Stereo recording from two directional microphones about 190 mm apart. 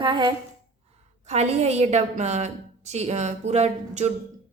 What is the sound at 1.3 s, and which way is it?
A woman's voice, 35° right (ahead or behind).